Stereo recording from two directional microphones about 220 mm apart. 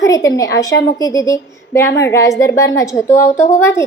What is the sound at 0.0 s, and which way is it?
A woman's voice, 15° left (ahead or behind).